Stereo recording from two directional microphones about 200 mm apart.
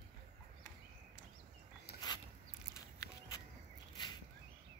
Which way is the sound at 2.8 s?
15° left (ahead or behind).